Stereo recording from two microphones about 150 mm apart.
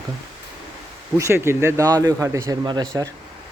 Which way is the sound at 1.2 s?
20° right (ahead or behind).